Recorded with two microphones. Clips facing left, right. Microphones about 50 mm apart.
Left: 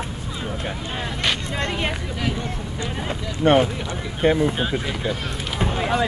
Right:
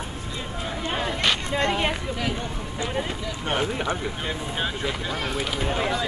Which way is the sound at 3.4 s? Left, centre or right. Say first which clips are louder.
Left 12 dB; left.